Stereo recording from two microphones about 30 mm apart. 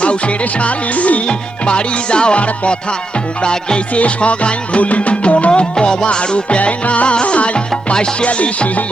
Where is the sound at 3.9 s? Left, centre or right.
Left.